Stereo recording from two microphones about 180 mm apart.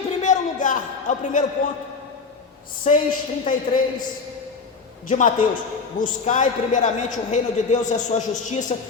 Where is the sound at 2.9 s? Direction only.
40° left (ahead or behind).